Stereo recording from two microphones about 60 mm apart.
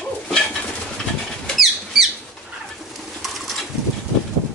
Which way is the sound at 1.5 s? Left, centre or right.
Centre.